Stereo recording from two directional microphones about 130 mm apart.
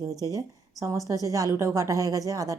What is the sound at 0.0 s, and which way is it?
Speech, 25° right (ahead or behind).